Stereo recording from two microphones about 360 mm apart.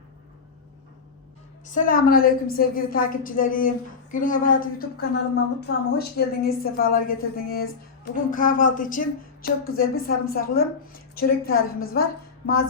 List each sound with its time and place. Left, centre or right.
1.6 s a woman's voice: left